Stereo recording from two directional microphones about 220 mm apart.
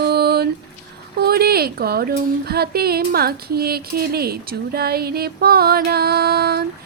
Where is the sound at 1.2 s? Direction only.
45° right (ahead or behind).